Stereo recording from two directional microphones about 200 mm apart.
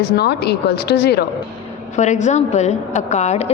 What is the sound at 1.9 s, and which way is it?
A woman's voice, 35° left (ahead or behind).